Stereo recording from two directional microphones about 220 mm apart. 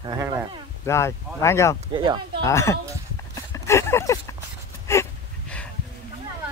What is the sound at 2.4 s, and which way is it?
Speech, 10° left (ahead or behind).